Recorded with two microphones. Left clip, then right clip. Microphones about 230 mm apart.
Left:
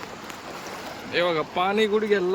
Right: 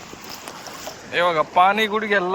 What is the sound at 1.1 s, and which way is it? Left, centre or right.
Speech, centre.